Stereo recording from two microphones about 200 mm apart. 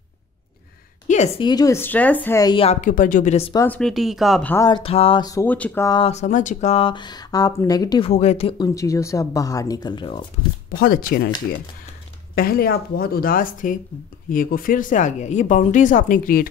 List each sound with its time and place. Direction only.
1.0 s a sound: 35° left (ahead or behind)
1.4 s speech: 20° left (ahead or behind)
3.5 s speech: 10° left (ahead or behind)
4.6 s speech: 25° left (ahead or behind)
5.9 s speech: 25° left (ahead or behind)
8.1 s speech: 35° left (ahead or behind)
10.8 s speech: 50° left (ahead or behind)
12.4 s speech: 50° left (ahead or behind)